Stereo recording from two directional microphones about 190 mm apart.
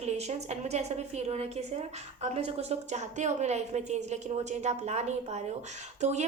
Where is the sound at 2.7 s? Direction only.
35° right (ahead or behind).